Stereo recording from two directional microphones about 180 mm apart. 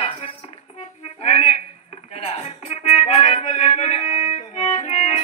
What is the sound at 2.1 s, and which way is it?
Music, 35° left (ahead or behind).